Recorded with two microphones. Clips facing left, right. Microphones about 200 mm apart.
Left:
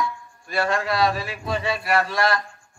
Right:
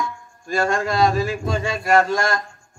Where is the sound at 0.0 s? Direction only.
45° right (ahead or behind).